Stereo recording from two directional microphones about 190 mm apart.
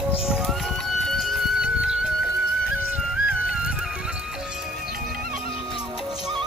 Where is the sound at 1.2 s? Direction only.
5° right (ahead or behind).